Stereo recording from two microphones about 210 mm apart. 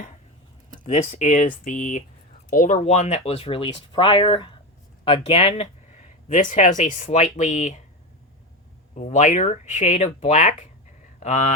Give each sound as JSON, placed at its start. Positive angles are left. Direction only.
{"t": 0.9, "sound": "speech", "side_deg": 30}
{"t": 9.0, "sound": "speech", "side_deg": 35}